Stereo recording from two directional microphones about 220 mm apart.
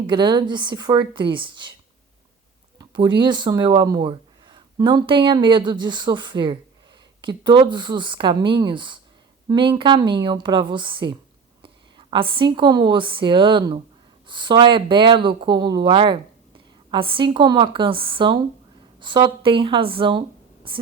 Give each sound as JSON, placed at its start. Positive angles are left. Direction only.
{"t": 0.1, "sound": "speech", "side_deg": -20}
{"t": 2.7, "sound": "a woman's voice", "side_deg": -20}